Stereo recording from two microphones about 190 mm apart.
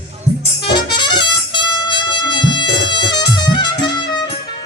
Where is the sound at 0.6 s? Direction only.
25° left (ahead or behind).